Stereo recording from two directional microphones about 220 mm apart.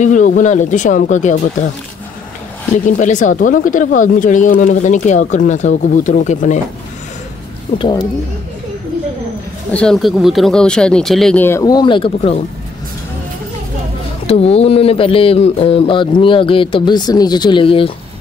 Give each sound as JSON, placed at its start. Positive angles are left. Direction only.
{"t": 0.0, "sound": "speech", "side_deg": 35}
{"t": 3.0, "sound": "speech", "side_deg": 35}
{"t": 7.8, "sound": "speech", "side_deg": 20}
{"t": 9.7, "sound": "speech", "side_deg": 5}
{"t": 14.2, "sound": "speech", "side_deg": 25}